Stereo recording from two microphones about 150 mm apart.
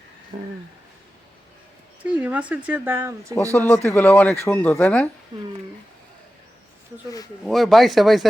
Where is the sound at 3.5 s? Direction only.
10° left (ahead or behind).